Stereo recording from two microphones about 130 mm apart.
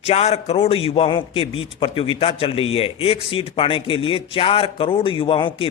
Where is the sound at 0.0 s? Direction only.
50° left (ahead or behind).